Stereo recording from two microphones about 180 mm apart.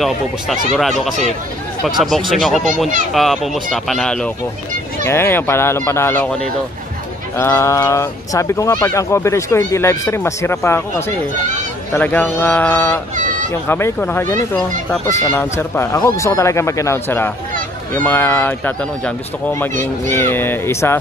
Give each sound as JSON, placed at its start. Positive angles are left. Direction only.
{"t": 0.0, "sound": "speech", "side_deg": 0}
{"t": 13.1, "sound": "a sound", "side_deg": -45}
{"t": 13.7, "sound": "speech", "side_deg": 15}